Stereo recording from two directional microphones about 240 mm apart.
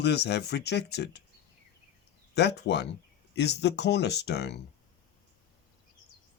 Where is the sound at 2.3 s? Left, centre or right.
Left.